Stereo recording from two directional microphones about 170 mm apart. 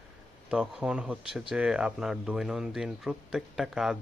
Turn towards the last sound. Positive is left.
turn(degrees=0)  # may be behind; listen again after turning